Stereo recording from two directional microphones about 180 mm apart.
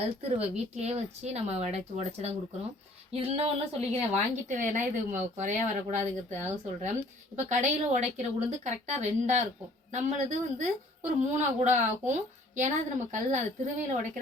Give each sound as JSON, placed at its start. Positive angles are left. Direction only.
{"t": 0.2, "sound": "a woman's voice", "side_deg": -35}